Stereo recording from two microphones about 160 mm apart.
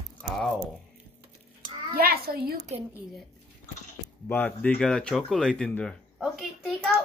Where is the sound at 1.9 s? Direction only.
70° right (ahead or behind).